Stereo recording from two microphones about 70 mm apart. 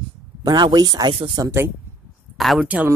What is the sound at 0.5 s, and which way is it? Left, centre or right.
Speech, right.